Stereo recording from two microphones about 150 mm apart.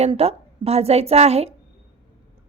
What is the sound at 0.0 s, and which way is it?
A woman's voice, 40° right (ahead or behind).